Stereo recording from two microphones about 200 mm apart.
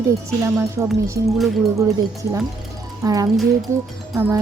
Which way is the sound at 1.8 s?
15° right (ahead or behind).